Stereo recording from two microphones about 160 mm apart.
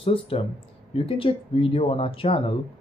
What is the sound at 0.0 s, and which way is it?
Speech, 35° left (ahead or behind).